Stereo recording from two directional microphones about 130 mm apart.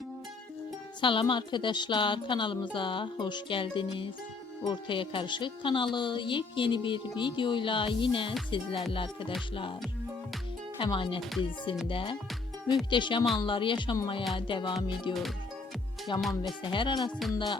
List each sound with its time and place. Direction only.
1.0 s speech: 40° left (ahead or behind)
10.8 s speech: 40° left (ahead or behind)
16.1 s speech: 40° left (ahead or behind)